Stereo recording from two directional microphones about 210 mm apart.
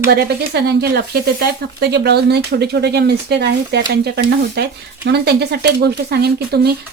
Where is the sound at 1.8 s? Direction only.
50° right (ahead or behind).